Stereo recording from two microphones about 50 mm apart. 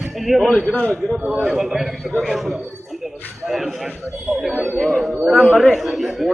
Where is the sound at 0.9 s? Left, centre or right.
Centre.